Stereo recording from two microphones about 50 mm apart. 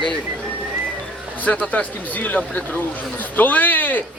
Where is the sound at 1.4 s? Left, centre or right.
Left.